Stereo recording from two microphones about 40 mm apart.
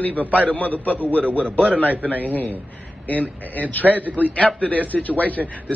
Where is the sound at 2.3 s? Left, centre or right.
Left.